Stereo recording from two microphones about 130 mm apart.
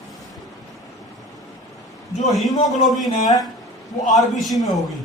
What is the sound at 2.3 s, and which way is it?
Speech, centre (ahead or behind).